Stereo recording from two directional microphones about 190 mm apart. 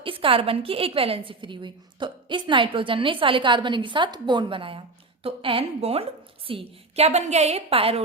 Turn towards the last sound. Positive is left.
turn(degrees=-30)  # may be behind; listen again after turning